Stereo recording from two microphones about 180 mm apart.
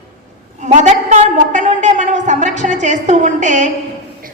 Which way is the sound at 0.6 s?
40° right (ahead or behind).